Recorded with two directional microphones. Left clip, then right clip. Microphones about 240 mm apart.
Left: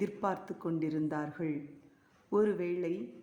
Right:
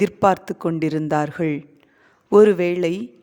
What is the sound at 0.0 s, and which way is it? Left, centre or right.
A woman's voice, right.